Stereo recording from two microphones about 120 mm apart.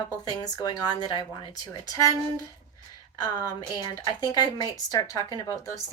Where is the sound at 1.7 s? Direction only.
30° left (ahead or behind).